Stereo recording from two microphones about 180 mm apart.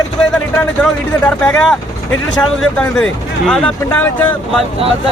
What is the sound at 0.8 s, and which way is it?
Speech, 5° left (ahead or behind).